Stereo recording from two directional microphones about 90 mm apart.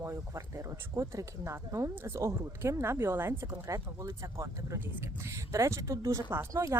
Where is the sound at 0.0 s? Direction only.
35° right (ahead or behind).